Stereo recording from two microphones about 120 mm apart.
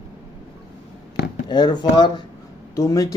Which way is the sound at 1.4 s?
35° left (ahead or behind).